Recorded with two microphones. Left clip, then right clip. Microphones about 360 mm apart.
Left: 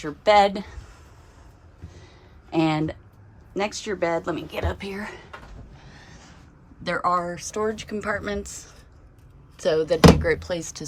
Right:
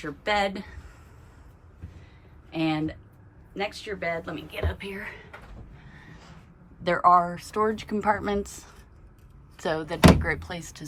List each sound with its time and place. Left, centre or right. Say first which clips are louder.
0.0 s a woman's voice: left 9 dB; centre
2.5 s a woman's voice: left 5 dB; centre
5.8 s a sound: left 2 dB; centre
6.8 s speech: right 4 dB; centre